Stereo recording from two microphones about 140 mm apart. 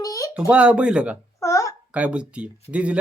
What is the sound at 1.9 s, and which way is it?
Speech, 10° right (ahead or behind).